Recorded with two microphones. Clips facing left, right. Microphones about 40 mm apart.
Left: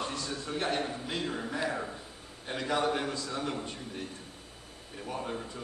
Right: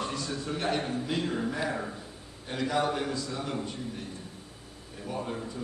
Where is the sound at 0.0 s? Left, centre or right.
Left.